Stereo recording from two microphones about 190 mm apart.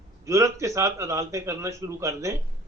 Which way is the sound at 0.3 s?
15° right (ahead or behind).